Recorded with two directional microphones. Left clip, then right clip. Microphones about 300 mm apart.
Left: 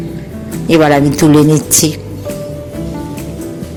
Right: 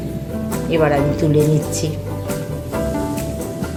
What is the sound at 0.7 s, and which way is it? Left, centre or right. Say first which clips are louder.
Speech: left 7 dB; left.